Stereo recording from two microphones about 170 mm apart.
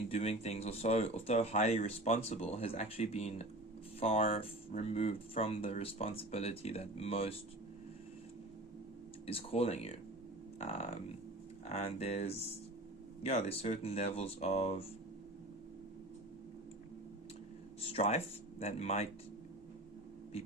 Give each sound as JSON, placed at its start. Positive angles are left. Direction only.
{"t": 0.1, "sound": "speech", "side_deg": 40}
{"t": 9.2, "sound": "speech", "side_deg": 35}
{"t": 17.9, "sound": "speech", "side_deg": 35}